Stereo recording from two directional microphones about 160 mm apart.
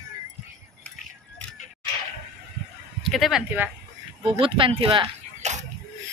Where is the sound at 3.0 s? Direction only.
Centre (ahead or behind).